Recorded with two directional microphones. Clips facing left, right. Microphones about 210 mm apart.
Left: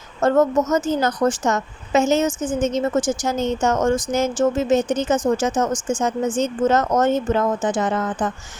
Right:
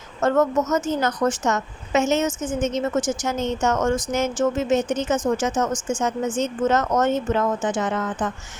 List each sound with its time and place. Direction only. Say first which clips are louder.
0.2 s a woman's voice: left 3 dB; 30° left (ahead or behind)